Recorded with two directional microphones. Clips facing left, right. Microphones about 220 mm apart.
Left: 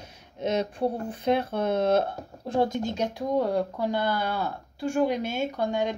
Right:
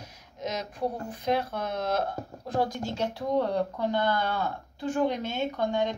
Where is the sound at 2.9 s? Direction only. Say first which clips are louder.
Right 1 dB; 15° left (ahead or behind).